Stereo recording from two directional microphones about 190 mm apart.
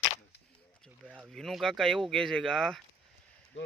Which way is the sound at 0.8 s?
Centre (ahead or behind).